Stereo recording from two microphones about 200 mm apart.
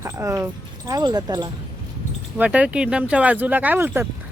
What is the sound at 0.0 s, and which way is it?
Speech, 15° right (ahead or behind).